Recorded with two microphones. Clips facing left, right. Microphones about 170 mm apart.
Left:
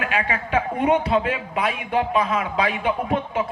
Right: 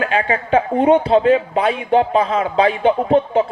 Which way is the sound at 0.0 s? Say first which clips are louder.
Right 6 dB; 30° right (ahead or behind).